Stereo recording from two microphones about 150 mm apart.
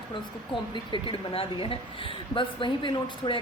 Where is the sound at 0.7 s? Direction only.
30° left (ahead or behind).